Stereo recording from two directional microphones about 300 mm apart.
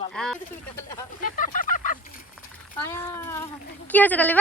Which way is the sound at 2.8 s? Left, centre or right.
Centre.